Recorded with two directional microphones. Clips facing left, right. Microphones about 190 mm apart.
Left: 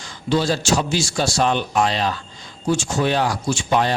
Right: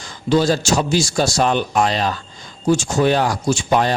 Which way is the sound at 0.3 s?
45° right (ahead or behind).